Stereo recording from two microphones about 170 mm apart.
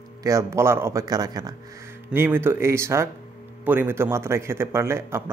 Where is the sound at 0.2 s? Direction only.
20° right (ahead or behind).